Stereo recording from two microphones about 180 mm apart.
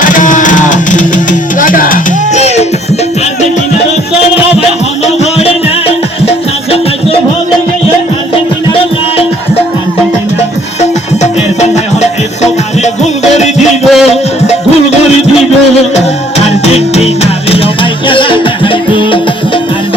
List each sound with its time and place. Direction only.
0.0 s music: 45° left (ahead or behind)
5.0 s music: 35° left (ahead or behind)
10.8 s music: 40° left (ahead or behind)
13.8 s a sound: centre (ahead or behind)
16.4 s music: 35° left (ahead or behind)
18.1 s music: 30° left (ahead or behind)